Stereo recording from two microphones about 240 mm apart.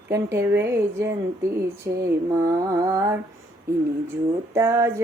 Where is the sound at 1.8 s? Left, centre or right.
Right.